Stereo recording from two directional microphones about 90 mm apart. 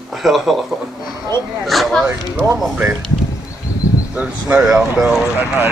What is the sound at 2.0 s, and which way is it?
Speech, 25° right (ahead or behind).